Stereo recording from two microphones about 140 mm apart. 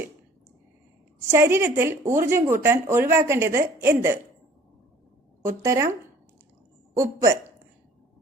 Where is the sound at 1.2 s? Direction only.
20° right (ahead or behind).